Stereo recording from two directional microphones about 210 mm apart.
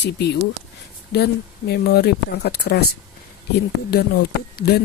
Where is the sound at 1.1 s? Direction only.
50° left (ahead or behind).